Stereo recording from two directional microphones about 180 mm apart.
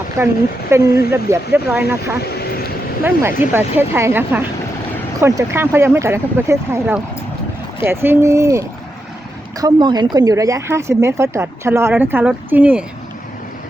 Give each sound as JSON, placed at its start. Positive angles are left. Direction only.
{"t": 0.2, "sound": "speech", "side_deg": -15}
{"t": 2.2, "sound": "vehicle", "side_deg": 60}
{"t": 3.0, "sound": "speech", "side_deg": -10}